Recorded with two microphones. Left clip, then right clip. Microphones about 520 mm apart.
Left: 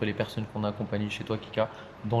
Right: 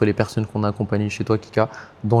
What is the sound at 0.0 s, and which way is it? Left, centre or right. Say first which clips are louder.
Speech: right 11 dB; right.